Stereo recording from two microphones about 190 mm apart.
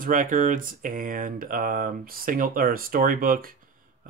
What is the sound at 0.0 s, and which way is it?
Speech, 45° right (ahead or behind).